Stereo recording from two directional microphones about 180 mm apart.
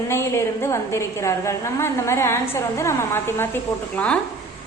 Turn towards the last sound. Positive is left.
turn(degrees=10)  # may be behind; listen again after turning